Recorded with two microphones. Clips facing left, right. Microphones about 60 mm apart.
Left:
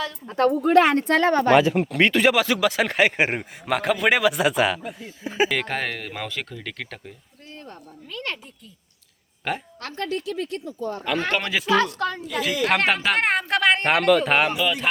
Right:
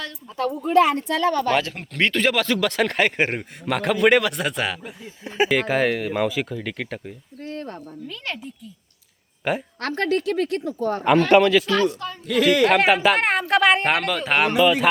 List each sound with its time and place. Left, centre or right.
0.3 s speech: left
1.5 s speech: centre
7.4 s a woman's voice: right
8.0 s speech: centre
9.4 s a woman's voice: centre
9.8 s a woman's voice: right
11.3 s speech: centre
11.9 s a woman's voice: left
12.4 s a woman's voice: right
12.6 s speech: centre